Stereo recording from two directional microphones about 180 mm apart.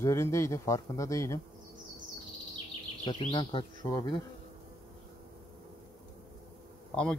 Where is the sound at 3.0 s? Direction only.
30° left (ahead or behind).